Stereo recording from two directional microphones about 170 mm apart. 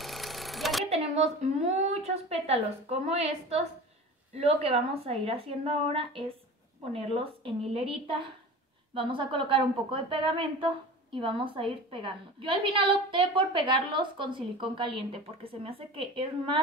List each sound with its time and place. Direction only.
0.0 s sewing machine: centre (ahead or behind)
0.8 s a woman's voice: 40° right (ahead or behind)